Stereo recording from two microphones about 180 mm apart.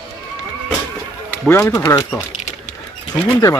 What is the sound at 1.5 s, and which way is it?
Speech, 10° left (ahead or behind).